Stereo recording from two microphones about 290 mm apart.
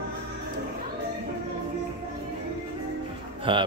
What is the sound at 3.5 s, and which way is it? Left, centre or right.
Speech, centre.